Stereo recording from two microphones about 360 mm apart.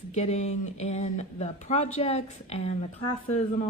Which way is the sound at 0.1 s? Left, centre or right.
Centre.